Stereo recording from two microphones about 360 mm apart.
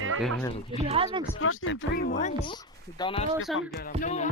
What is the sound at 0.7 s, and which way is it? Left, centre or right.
Speech, centre.